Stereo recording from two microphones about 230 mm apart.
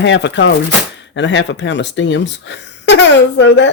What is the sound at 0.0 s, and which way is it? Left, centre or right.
Speech, left.